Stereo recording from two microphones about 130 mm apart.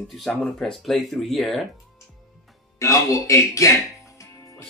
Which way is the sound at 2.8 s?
25° left (ahead or behind).